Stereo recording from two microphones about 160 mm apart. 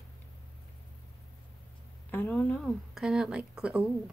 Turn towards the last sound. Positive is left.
turn(degrees=-5)  # may be behind; listen again after turning